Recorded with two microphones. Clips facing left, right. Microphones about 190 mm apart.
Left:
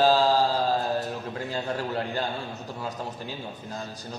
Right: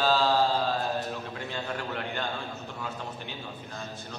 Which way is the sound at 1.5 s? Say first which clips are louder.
Left 5 dB; 35° left (ahead or behind).